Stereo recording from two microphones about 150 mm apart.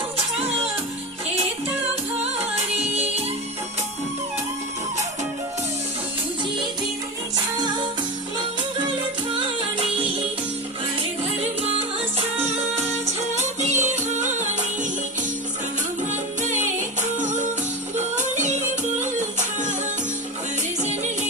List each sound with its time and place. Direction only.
12.1 s music: 45° right (ahead or behind)
16.4 s music: 55° right (ahead or behind)
20.8 s music: 50° right (ahead or behind)